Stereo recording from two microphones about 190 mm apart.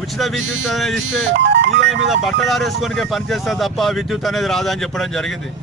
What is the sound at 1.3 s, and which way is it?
Music, 70° right (ahead or behind).